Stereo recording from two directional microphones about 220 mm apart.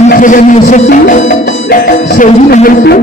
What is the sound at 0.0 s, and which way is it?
Speech, 35° left (ahead or behind).